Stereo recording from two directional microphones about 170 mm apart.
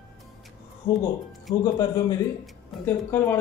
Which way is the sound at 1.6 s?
20° left (ahead or behind).